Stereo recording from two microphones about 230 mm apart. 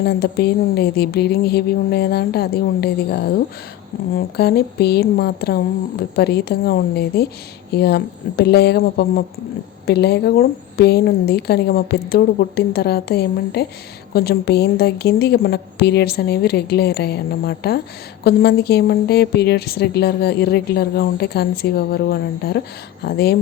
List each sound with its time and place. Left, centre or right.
0.0 s a woman's voice: left